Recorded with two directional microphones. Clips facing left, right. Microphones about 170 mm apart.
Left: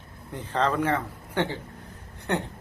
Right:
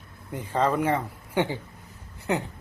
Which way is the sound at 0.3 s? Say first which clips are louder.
Right 1 dB; 10° right (ahead or behind).